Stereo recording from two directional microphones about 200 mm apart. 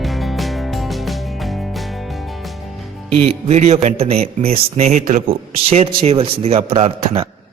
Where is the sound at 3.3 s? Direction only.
30° right (ahead or behind).